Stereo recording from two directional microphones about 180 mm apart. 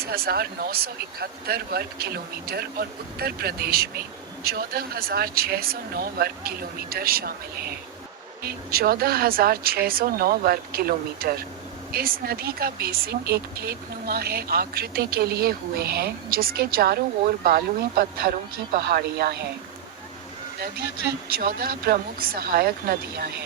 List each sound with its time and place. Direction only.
0.0 s speech: 60° right (ahead or behind)
21.2 s speech: 55° right (ahead or behind)